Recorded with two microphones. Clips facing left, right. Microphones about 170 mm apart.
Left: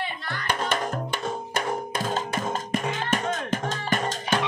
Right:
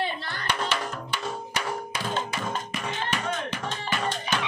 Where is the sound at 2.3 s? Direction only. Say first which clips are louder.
Left 4 dB; 45° left (ahead or behind).